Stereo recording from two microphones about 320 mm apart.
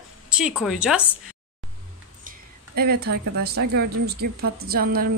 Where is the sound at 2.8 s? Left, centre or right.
Right.